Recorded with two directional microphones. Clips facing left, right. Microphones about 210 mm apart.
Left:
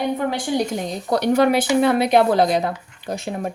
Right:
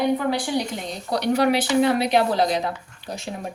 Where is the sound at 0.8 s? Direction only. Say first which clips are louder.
Left 4 dB; 50° left (ahead or behind).